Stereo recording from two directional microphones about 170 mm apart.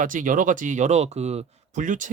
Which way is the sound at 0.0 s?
50° right (ahead or behind).